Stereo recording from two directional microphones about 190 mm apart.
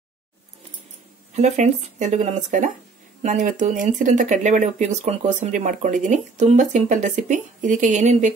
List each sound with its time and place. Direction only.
1.3 s speech: 40° right (ahead or behind)